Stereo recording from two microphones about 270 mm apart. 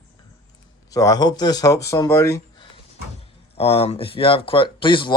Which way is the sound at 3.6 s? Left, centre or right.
Left.